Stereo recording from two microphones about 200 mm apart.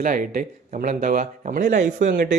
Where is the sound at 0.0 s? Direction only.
40° right (ahead or behind).